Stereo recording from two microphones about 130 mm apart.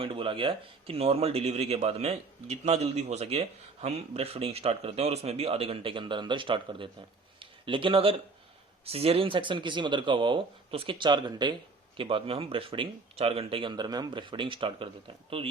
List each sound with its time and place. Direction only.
0.0 s speech: 45° right (ahead or behind)